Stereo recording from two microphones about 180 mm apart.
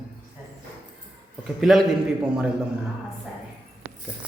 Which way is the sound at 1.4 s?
Centre (ahead or behind).